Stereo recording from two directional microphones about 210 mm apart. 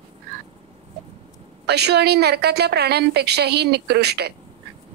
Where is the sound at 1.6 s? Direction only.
50° right (ahead or behind).